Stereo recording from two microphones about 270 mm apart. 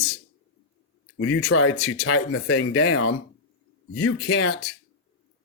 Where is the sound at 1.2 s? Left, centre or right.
Left.